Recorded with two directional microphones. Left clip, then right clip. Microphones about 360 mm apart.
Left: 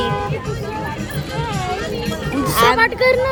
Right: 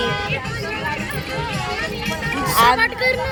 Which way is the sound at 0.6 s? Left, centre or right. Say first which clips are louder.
Right 1 dB; centre.